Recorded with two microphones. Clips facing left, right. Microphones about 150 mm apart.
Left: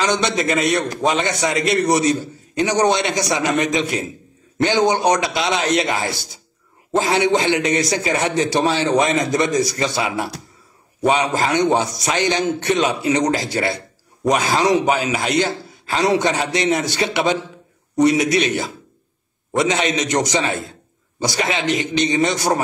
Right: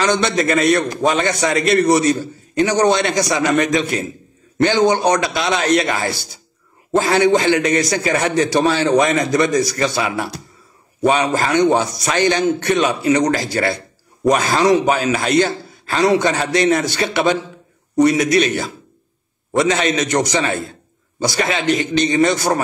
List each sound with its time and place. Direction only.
0.0 s a man's voice: 20° left (ahead or behind)